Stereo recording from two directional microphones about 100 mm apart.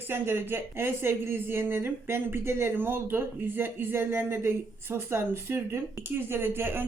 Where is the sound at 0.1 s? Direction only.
20° right (ahead or behind).